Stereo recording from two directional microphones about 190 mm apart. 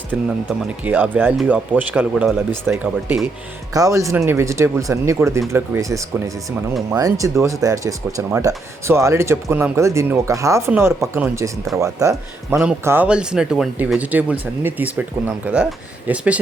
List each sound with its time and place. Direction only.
0.9 s speech: 10° right (ahead or behind)
16.0 s speech: 5° right (ahead or behind)